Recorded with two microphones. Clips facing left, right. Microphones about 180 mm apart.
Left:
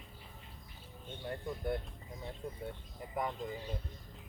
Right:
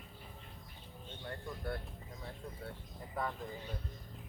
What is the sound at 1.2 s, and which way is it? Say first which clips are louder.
Speech: left 4 dB; 20° left (ahead or behind).